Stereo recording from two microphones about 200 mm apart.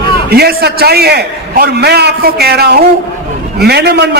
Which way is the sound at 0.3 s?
50° right (ahead or behind).